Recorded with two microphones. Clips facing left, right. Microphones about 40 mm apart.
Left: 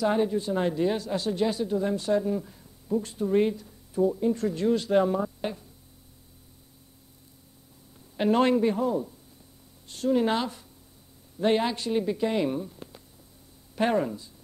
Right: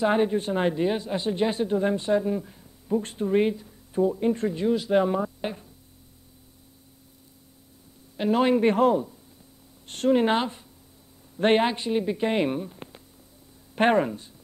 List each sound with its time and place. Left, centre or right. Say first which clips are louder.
0.0 s a man's voice: right 2 dB; right; by 2.7 s centre
2.9 s speech: right 2 dB; right
3.3 s a man's voice: right 1 dB; right
4.5 s speech: right 1 dB; centre
5.2 s music: right 1 dB; centre
8.2 s speech: even; centre
8.6 s a man's voice: right 5 dB; right
10.2 s a man's voice: right 3 dB; right
11.3 s a man's voice: right 3 dB; right
11.6 s a man's voice: right 2 dB; right
12.2 s speech: right 2 dB; right